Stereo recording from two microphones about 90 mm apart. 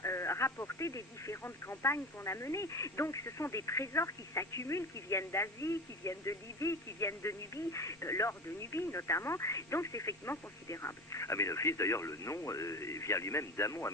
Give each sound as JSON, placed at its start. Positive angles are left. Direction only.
{"t": 0.0, "sound": "speech", "side_deg": 30}